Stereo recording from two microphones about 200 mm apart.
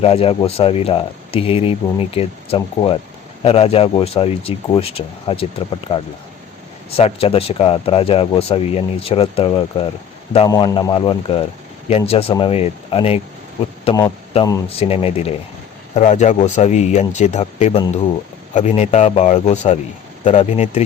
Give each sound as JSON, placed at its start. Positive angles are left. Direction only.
{"t": 0.0, "sound": "speech", "side_deg": 30}